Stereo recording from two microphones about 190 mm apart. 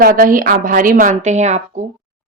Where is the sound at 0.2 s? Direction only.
45° right (ahead or behind).